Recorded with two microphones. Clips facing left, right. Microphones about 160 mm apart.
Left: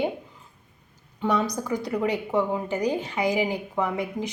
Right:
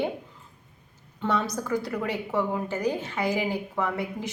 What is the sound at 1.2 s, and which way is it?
A woman's voice, 15° left (ahead or behind).